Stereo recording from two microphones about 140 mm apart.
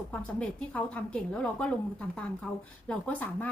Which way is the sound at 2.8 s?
10° left (ahead or behind).